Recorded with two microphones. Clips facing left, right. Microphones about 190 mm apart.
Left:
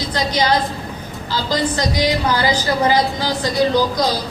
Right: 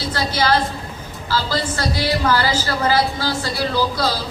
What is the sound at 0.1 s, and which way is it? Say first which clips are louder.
A woman's voice: left 1 dB; 15° left (ahead or behind).